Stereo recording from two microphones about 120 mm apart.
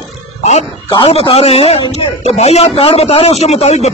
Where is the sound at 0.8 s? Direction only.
50° left (ahead or behind).